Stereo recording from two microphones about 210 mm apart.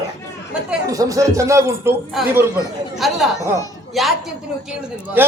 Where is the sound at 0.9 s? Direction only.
15° right (ahead or behind).